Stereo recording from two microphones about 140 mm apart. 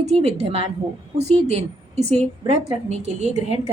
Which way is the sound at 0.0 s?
50° right (ahead or behind).